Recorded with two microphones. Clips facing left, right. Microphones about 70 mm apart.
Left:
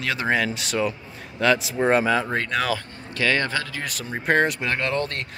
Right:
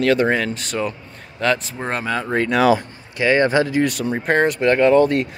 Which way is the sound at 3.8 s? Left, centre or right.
Centre.